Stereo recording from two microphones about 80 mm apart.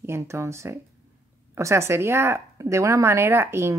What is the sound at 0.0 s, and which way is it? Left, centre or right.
Speech, right.